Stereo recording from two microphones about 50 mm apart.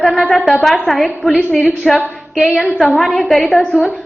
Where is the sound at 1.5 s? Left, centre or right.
Left.